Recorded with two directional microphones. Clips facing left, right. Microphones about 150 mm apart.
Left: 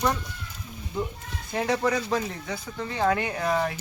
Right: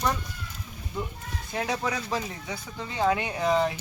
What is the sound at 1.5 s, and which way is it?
Speech, centre (ahead or behind).